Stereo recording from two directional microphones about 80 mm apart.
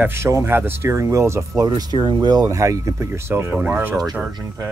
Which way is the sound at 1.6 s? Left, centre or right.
Right.